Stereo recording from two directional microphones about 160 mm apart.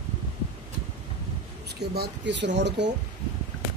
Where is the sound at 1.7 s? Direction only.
90° right.